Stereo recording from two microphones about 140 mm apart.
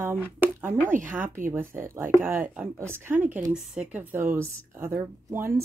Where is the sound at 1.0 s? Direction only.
15° right (ahead or behind).